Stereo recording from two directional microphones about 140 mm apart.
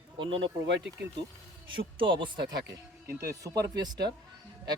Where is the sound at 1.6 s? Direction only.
35° right (ahead or behind).